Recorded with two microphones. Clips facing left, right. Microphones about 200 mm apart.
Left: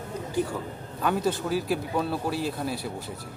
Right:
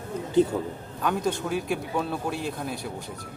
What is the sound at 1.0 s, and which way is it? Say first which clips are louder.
Speech: left 1 dB; 5° left (ahead or behind).